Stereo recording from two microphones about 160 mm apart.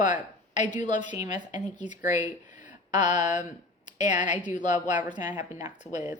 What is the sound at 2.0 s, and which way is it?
Speech, 50° left (ahead or behind).